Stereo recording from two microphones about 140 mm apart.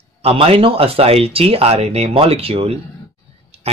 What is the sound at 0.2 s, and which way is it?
Speech, 45° right (ahead or behind).